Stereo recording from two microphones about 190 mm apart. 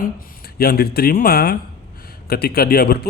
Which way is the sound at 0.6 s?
55° left (ahead or behind).